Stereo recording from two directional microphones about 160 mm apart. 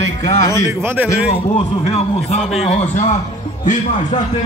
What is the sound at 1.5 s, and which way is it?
Speech, 40° left (ahead or behind).